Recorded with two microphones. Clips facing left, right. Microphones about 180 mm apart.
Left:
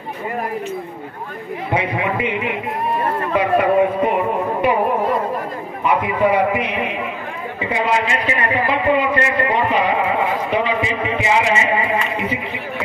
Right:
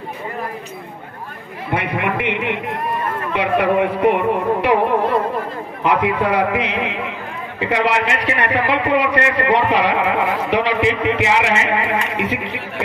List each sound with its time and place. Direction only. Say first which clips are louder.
1.7 s a man's voice: even; 65° right (ahead or behind); by 4.7 s 85° right
5.9 s a man's voice: even; 90° right
7.7 s a man's voice: right 1 dB; 75° right (ahead or behind)